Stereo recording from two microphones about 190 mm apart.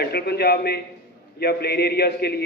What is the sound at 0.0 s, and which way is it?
A man's voice, 55° left (ahead or behind).